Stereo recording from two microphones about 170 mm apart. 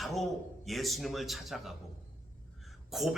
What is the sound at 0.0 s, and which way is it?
A man's voice, centre (ahead or behind).